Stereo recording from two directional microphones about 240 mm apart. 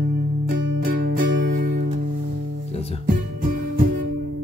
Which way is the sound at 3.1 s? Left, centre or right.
Right.